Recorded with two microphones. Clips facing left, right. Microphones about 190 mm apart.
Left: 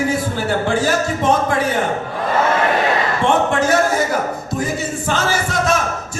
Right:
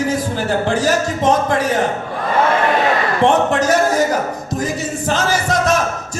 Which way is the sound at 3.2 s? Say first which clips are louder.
Right 3 dB; 35° right (ahead or behind).